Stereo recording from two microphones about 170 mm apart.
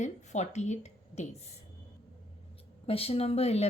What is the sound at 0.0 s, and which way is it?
A woman's voice, 45° left (ahead or behind).